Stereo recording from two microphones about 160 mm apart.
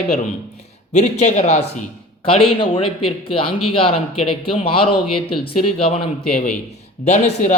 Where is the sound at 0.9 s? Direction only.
45° left (ahead or behind).